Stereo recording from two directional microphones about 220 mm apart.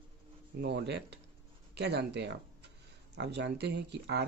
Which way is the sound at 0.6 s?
50° right (ahead or behind).